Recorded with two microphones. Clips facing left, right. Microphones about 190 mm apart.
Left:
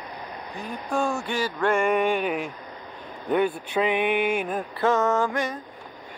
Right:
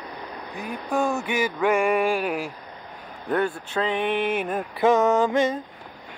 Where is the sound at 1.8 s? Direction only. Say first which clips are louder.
Even; centre (ahead or behind).